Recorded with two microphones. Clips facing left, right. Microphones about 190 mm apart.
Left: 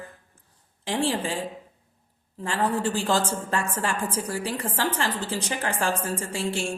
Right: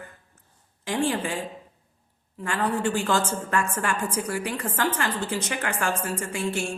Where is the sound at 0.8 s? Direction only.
30° left (ahead or behind).